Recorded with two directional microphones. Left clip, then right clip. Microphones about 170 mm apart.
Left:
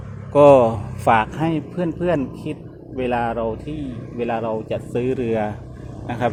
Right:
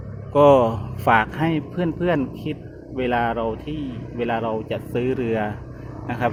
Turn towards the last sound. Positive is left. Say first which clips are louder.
# left 1 dB
turn(degrees=0)  # may be behind; listen again after turning